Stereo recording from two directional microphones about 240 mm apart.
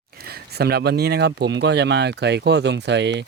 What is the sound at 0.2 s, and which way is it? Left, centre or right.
Speech, right.